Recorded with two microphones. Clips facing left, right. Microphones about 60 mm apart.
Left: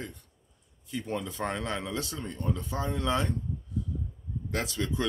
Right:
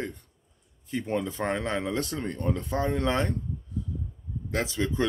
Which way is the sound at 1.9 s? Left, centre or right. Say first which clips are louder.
Right 5 dB; right.